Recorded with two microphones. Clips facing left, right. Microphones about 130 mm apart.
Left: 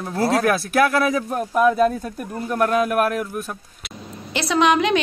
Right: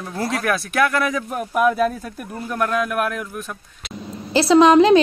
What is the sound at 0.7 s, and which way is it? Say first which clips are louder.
Speech: right 1 dB; centre (ahead or behind).